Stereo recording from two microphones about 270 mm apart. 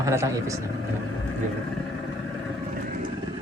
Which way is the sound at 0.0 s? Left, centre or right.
Centre.